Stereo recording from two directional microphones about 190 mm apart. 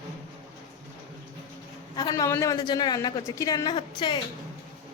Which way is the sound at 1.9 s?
20° left (ahead or behind).